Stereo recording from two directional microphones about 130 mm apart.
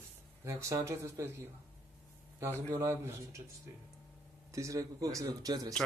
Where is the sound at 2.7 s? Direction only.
20° right (ahead or behind).